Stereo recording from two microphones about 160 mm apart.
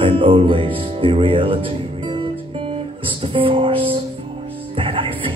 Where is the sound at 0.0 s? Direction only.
35° right (ahead or behind).